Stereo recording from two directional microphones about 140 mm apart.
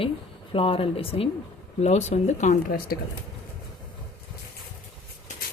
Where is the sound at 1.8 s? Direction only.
55° left (ahead or behind); by 3.0 s 85° left.